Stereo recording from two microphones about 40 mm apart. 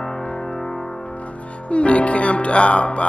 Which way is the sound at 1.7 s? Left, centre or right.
Left.